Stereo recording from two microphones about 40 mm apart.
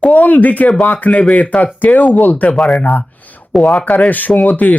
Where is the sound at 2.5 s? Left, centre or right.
Centre.